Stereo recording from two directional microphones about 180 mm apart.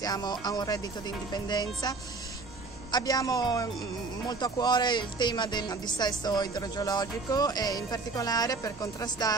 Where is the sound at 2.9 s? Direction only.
20° left (ahead or behind).